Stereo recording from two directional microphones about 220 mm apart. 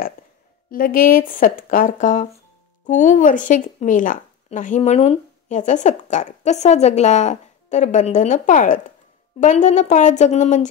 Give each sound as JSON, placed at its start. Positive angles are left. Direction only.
{"t": 0.7, "sound": "speech", "side_deg": 40}